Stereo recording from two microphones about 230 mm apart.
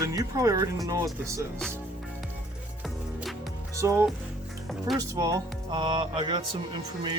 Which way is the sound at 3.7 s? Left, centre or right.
Centre.